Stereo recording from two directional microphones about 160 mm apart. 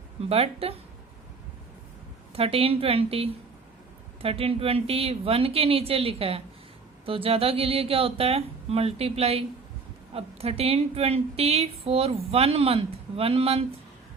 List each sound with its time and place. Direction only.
0.3 s a woman's voice: 40° right (ahead or behind)
2.3 s a woman's voice: 35° right (ahead or behind)